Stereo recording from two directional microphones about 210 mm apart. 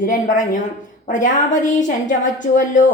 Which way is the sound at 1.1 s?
35° left (ahead or behind).